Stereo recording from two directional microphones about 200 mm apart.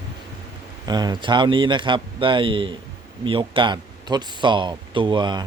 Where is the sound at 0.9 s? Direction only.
20° right (ahead or behind).